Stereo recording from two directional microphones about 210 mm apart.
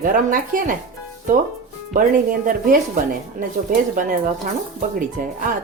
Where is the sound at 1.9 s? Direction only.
40° right (ahead or behind).